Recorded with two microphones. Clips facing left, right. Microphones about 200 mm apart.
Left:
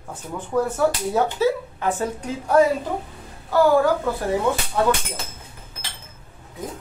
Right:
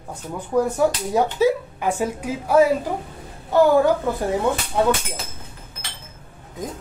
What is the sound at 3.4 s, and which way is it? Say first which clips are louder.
A woman's voice: right 1 dB; 20° right (ahead or behind).